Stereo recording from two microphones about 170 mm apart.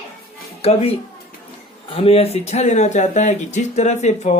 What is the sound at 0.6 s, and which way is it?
Speech, 35° left (ahead or behind).